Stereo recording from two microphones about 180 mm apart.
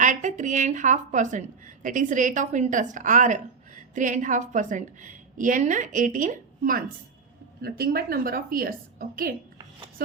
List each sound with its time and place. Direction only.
0.0 s a woman's voice: 45° right (ahead or behind)
7.6 s a woman's voice: 60° right (ahead or behind)